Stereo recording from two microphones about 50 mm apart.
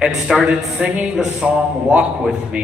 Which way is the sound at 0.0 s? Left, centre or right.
Centre.